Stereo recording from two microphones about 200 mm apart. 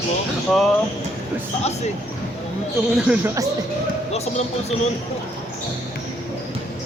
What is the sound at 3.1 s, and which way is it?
Speech, 10° right (ahead or behind).